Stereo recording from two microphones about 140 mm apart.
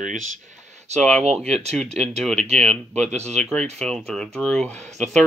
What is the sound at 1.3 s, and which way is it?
Speech, centre (ahead or behind).